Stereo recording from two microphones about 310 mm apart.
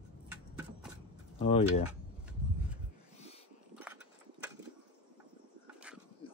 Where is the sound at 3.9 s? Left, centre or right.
Centre.